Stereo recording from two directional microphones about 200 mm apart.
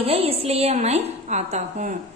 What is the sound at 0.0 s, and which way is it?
A woman's voice, 30° right (ahead or behind).